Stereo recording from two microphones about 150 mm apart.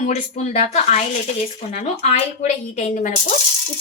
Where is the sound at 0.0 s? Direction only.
50° left (ahead or behind).